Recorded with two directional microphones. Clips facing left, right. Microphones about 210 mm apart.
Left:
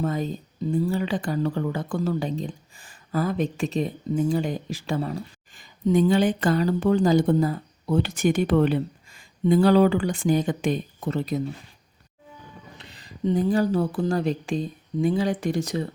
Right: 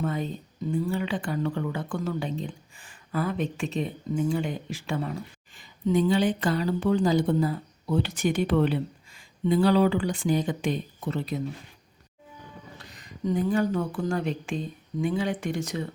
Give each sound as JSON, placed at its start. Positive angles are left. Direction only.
{"t": 0.0, "sound": "speech", "side_deg": 40}
{"t": 12.7, "sound": "speech", "side_deg": 25}